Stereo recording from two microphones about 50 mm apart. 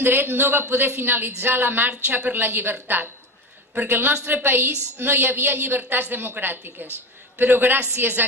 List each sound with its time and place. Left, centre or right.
0.0 s a woman's voice: right